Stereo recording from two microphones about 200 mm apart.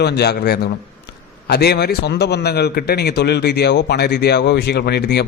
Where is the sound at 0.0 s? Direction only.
55° left (ahead or behind).